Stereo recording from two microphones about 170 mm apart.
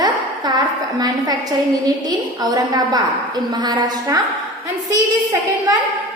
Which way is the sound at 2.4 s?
25° right (ahead or behind).